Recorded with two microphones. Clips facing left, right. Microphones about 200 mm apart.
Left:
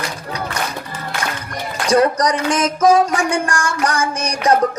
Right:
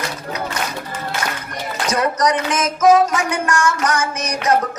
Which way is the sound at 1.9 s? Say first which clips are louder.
Left 4 dB; 30° left (ahead or behind).